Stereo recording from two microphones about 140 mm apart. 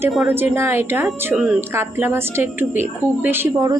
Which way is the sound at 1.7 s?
15° right (ahead or behind).